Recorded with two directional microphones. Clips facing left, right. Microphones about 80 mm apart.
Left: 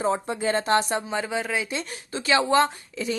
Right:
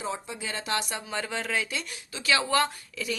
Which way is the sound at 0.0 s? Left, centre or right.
Left.